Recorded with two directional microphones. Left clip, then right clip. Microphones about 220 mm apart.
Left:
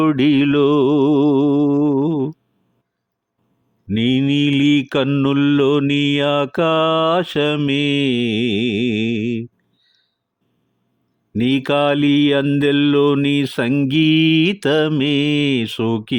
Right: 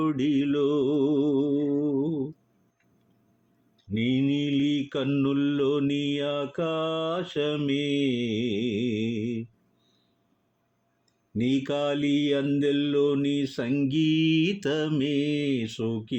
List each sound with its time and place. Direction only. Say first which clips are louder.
0.0 s music: left 11 dB; 45° left (ahead or behind)
3.9 s mantra: left 9 dB; 45° left (ahead or behind)
11.3 s mantra: left 10 dB; 45° left (ahead or behind)